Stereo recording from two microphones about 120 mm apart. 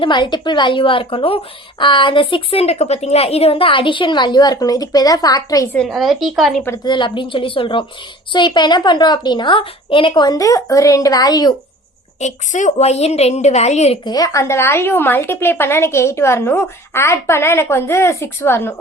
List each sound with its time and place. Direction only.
0.0 s a woman's voice: 40° left (ahead or behind)
5.7 s a woman's voice: centre (ahead or behind)
6.8 s a woman's voice: 40° left (ahead or behind)
12.2 s a woman's voice: 90° left; by 14.0 s 65° left (ahead or behind)
14.0 s a woman's voice: 30° left (ahead or behind)